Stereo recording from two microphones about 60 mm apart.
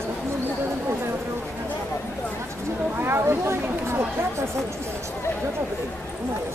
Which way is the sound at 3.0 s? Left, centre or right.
Right.